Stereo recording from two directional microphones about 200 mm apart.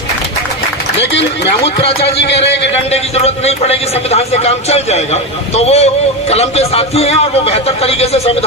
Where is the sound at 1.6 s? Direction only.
30° left (ahead or behind).